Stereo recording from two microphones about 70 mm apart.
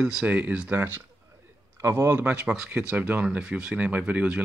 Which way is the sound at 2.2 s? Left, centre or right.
Centre.